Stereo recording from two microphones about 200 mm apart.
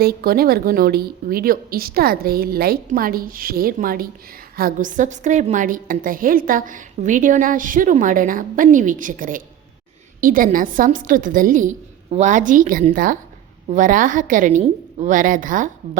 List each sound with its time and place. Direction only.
0.0 s a woman's voice: 50° right (ahead or behind)